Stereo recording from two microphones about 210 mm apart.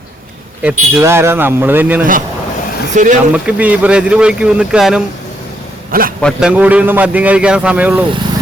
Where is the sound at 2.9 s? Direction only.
35° right (ahead or behind).